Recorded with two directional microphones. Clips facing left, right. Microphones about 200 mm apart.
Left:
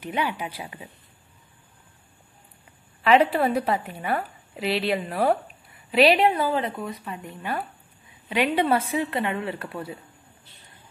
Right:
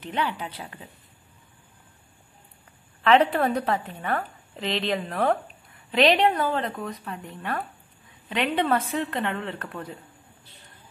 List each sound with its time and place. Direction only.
0.0 s a woman's voice: 10° left (ahead or behind)
3.0 s a woman's voice: 5° left (ahead or behind)